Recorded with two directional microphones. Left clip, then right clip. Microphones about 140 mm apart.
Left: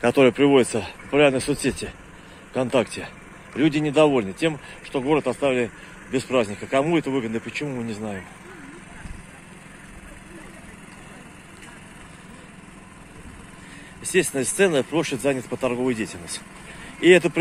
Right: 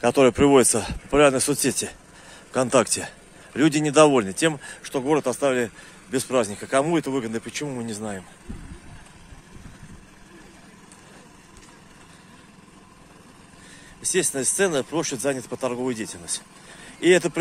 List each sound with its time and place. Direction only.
0.0 s speech: 35° right (ahead or behind); by 2.0 s 50° right (ahead or behind)
2.5 s speech: 65° right (ahead or behind)
14.0 s speech: 30° right (ahead or behind)